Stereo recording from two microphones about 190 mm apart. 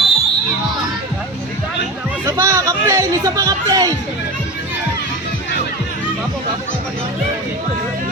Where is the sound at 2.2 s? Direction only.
15° right (ahead or behind).